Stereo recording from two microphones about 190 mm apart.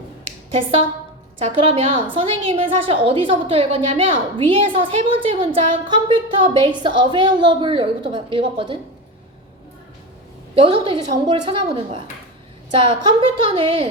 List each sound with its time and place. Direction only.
1.4 s a woman's voice: 30° right (ahead or behind)
10.5 s a woman's voice: 25° right (ahead or behind)